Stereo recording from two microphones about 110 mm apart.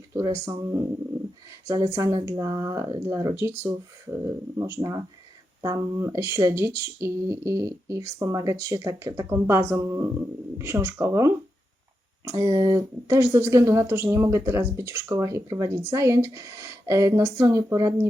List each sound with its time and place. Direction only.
0.1 s speech: 25° right (ahead or behind)